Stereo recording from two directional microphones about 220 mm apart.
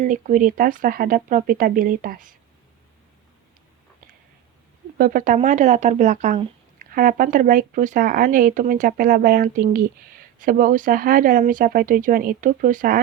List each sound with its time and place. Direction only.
0.0 s speech: 35° right (ahead or behind)
4.9 s speech: 40° right (ahead or behind)